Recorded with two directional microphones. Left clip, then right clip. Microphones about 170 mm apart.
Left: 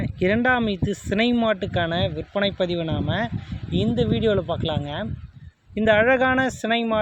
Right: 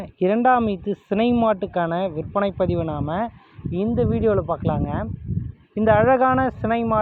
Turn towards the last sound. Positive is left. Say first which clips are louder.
# right 1 dB
turn(degrees=15)  # may be behind; listen again after turning